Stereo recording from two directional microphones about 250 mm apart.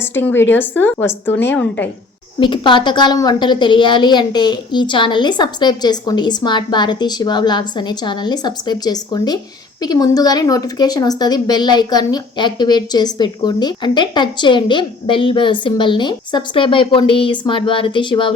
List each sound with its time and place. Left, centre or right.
0.0 s a woman's voice: centre
2.4 s a woman's voice: centre